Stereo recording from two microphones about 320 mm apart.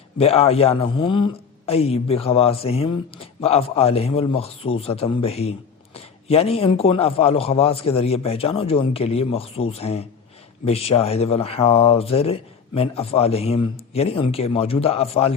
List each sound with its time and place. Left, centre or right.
0.2 s a man's voice: centre